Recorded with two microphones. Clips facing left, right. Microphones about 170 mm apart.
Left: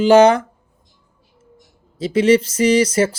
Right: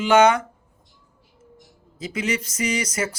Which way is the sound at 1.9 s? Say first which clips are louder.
Left 13 dB; 30° left (ahead or behind).